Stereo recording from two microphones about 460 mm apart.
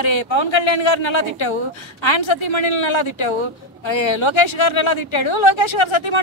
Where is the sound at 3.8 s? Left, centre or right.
Left.